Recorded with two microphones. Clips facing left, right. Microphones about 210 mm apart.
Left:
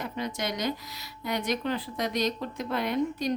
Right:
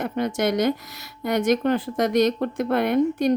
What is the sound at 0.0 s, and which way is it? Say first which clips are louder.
A woman's voice: right 9 dB; 50° right (ahead or behind).